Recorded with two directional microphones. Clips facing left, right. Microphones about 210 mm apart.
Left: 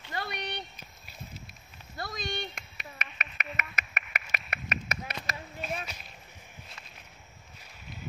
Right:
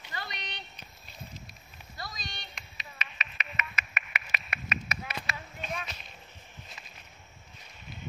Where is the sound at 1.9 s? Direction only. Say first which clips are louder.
Left 8 dB; 55° left (ahead or behind).